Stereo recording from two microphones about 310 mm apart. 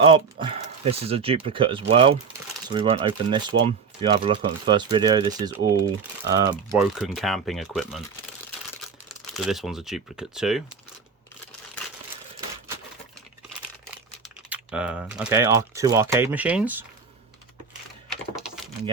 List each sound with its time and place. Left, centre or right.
0.0 s speech: centre
6.7 s speech: centre
9.0 s speech: centre
14.5 s speech: centre
18.1 s typing: centre